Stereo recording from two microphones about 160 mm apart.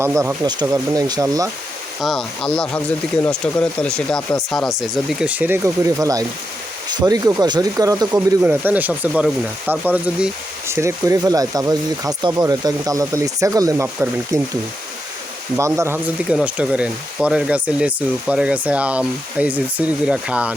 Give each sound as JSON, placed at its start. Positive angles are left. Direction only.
{"t": 0.0, "sound": "speech", "side_deg": -15}
{"t": 2.0, "sound": "speech", "side_deg": 0}
{"t": 5.0, "sound": "speech", "side_deg": -10}
{"t": 8.4, "sound": "speech", "side_deg": -10}
{"t": 15.5, "sound": "speech", "side_deg": -20}